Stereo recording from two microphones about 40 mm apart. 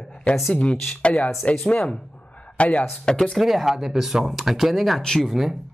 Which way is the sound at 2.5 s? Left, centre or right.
Left.